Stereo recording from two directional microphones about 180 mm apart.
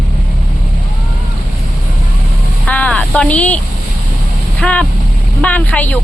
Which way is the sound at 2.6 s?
5° left (ahead or behind).